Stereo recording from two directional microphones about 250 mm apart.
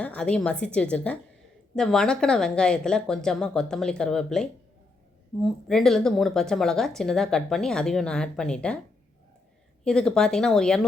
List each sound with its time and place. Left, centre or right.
0.0 s a woman's voice: centre
9.8 s a woman's voice: centre